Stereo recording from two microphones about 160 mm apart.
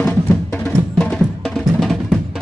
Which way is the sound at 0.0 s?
10° left (ahead or behind).